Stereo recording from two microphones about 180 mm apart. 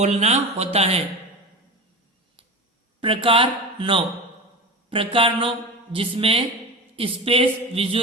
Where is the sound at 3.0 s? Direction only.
30° right (ahead or behind).